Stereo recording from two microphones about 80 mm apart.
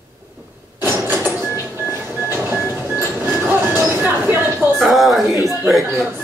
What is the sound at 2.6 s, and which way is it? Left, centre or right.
Train, right.